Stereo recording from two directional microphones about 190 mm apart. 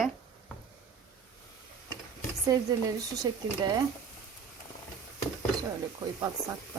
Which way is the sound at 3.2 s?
20° right (ahead or behind).